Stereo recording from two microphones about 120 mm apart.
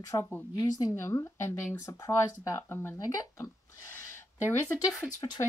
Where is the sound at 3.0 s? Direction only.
30° left (ahead or behind).